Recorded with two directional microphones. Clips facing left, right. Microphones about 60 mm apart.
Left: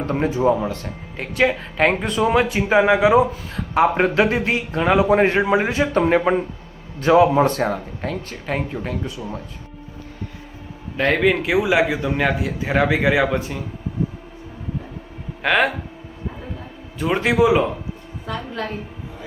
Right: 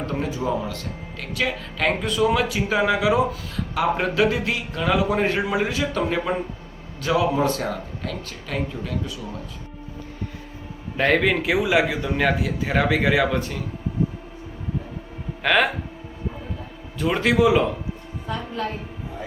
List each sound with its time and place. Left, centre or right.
0.0 s speech: left
10.9 s a man's voice: centre
15.4 s speech: centre
17.0 s a man's voice: centre